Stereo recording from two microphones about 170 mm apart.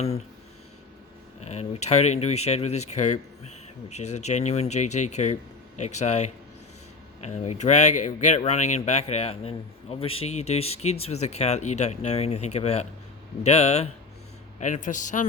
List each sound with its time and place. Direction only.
1.4 s a man's voice: 40° left (ahead or behind)